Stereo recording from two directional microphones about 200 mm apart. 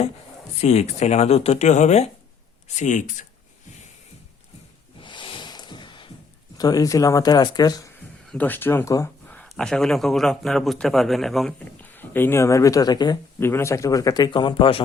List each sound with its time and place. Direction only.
0.6 s speech: 35° left (ahead or behind)
4.9 s a sound: 25° left (ahead or behind)
6.6 s speech: 20° left (ahead or behind)
8.3 s speech: 10° left (ahead or behind); by 14.8 s 25° left (ahead or behind)